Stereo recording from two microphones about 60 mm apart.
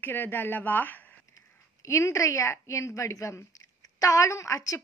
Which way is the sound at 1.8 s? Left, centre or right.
Left.